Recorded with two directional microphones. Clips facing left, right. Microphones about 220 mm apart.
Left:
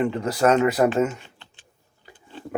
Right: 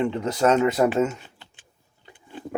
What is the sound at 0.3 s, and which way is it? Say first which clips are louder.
Speech: left 1 dB; 5° left (ahead or behind).